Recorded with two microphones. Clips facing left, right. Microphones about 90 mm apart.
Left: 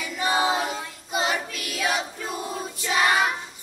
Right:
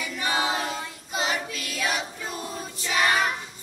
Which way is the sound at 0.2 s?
25° left (ahead or behind).